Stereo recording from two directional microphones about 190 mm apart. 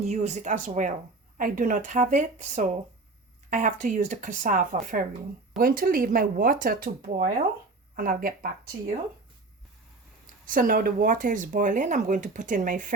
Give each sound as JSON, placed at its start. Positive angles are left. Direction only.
{"t": 0.0, "sound": "speech", "side_deg": -35}
{"t": 10.4, "sound": "speech", "side_deg": -45}